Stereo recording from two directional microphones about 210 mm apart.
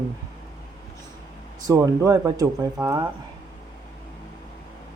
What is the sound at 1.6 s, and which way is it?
Speech, 15° right (ahead or behind).